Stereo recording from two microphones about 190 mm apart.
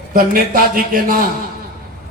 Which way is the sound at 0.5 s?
50° right (ahead or behind).